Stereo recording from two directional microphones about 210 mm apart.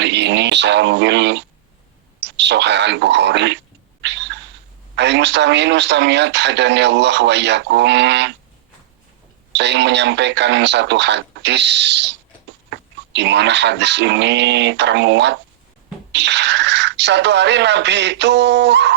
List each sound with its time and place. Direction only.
0.0 s speech: 55° right (ahead or behind)
4.9 s speech: 55° right (ahead or behind)
9.5 s speech: 55° right (ahead or behind)